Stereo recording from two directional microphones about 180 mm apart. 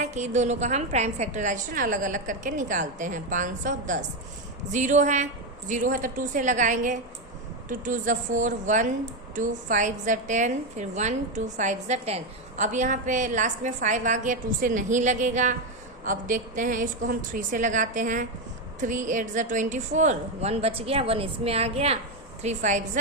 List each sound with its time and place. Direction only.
0.0 s a woman's voice: 40° right (ahead or behind)